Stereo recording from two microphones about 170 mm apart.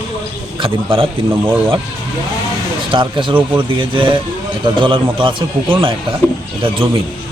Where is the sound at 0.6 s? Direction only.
30° right (ahead or behind).